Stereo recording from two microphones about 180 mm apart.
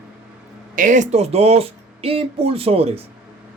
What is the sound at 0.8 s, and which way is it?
Speech, 45° right (ahead or behind).